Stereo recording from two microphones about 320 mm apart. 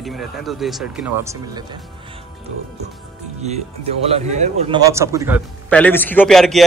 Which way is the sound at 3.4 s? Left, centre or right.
Centre.